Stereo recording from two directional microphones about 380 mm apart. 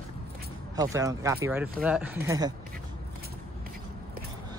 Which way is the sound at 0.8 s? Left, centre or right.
Centre.